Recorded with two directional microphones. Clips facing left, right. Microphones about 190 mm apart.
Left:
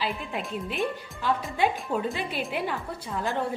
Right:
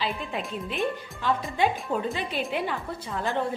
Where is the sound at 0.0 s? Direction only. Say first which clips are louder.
Right 1 dB; 5° left (ahead or behind).